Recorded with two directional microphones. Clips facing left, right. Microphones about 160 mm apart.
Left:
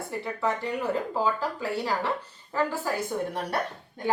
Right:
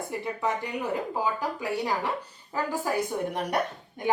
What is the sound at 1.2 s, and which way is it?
Speech, 15° right (ahead or behind).